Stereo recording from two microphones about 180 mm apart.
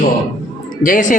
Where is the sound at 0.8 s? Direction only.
45° left (ahead or behind).